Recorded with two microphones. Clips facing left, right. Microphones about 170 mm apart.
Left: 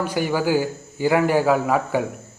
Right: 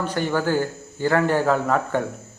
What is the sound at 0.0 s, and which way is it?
Speech, 10° left (ahead or behind).